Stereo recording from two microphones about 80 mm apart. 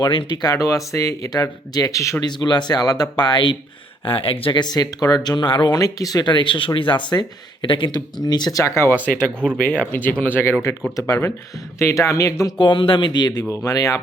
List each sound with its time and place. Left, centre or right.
0.0 s speech: left
0.5 s speech: left
1.3 s speech: left
2.2 s speech: left
4.0 s speech: left
5.7 s speech: left
6.2 s speech: left
7.9 s speech: left
8.6 s speech: left
9.0 s speech: centre
10.9 s speech: left
12.5 s speech: left
13.7 s speech: left